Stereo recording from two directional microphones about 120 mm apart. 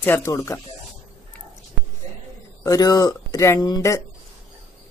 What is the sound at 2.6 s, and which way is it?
Speech, 30° left (ahead or behind).